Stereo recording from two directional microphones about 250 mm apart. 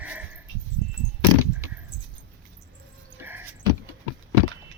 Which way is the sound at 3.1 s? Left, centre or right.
Centre.